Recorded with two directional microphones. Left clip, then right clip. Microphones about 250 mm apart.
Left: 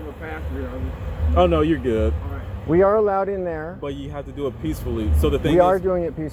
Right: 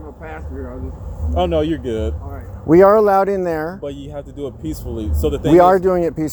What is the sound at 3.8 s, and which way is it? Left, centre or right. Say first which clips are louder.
Speech: right 2 dB; centre.